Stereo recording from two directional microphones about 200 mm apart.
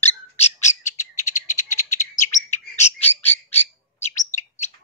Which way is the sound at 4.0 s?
35° left (ahead or behind).